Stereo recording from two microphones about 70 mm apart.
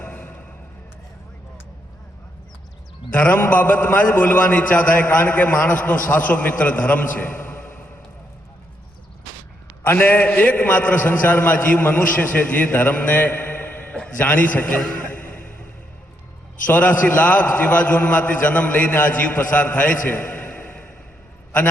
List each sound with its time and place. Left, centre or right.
0.0 s music: left
3.1 s a man's voice: left
9.8 s a man's voice: left
16.6 s a man's voice: left